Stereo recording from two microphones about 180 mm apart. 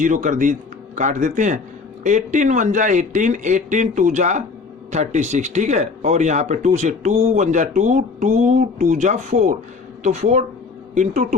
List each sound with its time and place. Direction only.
0.0 s speech: 45° right (ahead or behind)